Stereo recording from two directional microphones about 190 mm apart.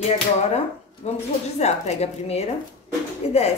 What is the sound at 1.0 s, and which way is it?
Speech, 35° left (ahead or behind).